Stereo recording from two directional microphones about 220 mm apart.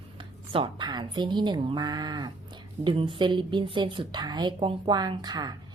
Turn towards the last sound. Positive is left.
turn(degrees=-20)  # may be behind; listen again after turning